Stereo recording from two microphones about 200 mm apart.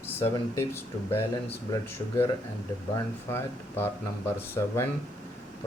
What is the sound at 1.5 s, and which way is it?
Speech, 15° left (ahead or behind).